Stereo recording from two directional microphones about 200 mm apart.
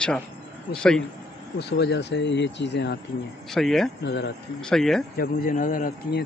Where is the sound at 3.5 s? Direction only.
Centre (ahead or behind).